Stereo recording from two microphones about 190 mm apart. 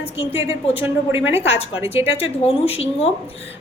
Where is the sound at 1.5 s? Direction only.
30° left (ahead or behind).